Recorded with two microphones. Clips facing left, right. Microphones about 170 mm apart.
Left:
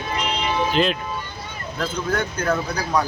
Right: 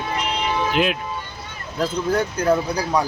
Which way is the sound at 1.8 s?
35° right (ahead or behind).